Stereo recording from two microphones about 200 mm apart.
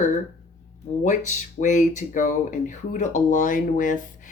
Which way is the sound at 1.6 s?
40° left (ahead or behind).